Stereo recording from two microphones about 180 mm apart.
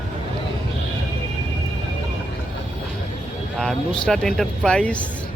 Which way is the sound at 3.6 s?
Centre (ahead or behind).